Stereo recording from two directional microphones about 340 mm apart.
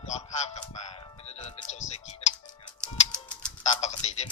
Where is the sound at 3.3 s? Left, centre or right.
Centre.